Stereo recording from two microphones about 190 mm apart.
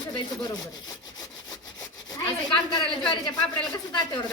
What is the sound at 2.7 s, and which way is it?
Speech, 25° left (ahead or behind).